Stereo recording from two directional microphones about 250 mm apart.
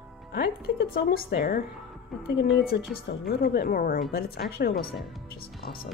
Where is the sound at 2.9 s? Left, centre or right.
Left.